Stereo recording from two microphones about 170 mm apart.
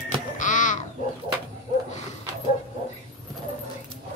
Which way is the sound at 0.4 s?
50° left (ahead or behind).